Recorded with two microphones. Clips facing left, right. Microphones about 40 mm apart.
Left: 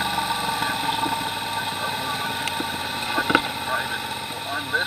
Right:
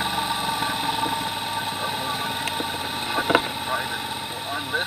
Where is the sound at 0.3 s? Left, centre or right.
Left.